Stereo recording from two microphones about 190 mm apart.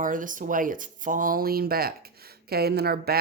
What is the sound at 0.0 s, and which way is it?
A woman's voice, 45° right (ahead or behind).